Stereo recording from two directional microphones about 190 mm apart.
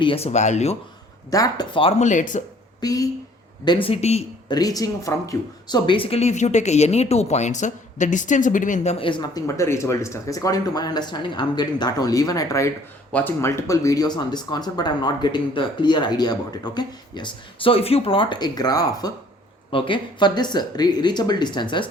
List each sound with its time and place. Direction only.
0.0 s speech: 30° left (ahead or behind)
1.3 s speech: 20° left (ahead or behind); by 2.4 s 40° left (ahead or behind)
2.8 s speech: 20° left (ahead or behind)
4.4 s speech: 20° left (ahead or behind)